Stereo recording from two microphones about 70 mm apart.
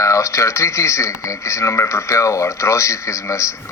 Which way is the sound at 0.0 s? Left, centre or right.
Left.